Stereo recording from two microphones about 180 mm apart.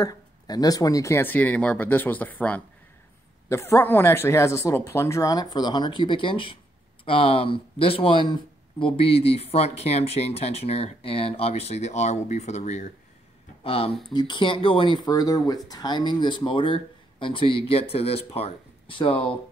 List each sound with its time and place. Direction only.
0.0 s speech: 20° left (ahead or behind)